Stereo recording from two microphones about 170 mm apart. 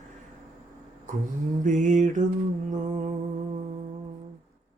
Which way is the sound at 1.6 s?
45° right (ahead or behind).